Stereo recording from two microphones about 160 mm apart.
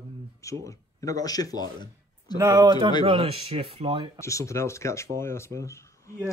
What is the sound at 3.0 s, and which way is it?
Speech, 35° right (ahead or behind).